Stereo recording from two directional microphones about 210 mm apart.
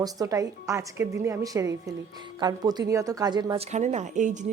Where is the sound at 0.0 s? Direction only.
15° right (ahead or behind).